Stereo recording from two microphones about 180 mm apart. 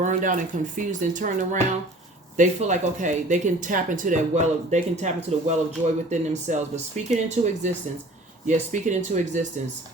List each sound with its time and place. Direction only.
0.0 s speech: 45° right (ahead or behind)
2.3 s speech: 45° right (ahead or behind)